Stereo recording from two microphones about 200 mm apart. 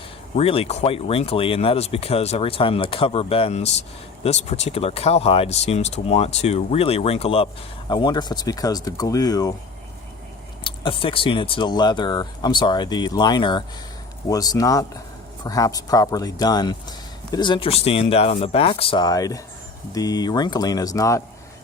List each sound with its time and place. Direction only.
0.3 s speech: 30° left (ahead or behind)
10.6 s speech: 25° left (ahead or behind)